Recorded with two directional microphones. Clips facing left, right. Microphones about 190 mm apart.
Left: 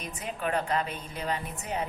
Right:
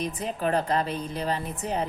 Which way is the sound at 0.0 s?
35° right (ahead or behind).